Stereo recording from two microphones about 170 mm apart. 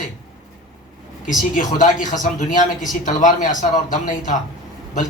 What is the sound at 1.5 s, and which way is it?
Speech, 50° left (ahead or behind).